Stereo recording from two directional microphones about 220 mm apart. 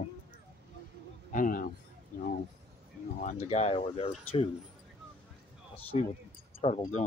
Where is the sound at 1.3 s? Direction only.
40° left (ahead or behind).